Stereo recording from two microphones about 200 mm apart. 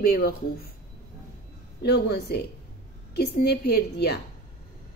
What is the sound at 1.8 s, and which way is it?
A woman's voice, 55° left (ahead or behind).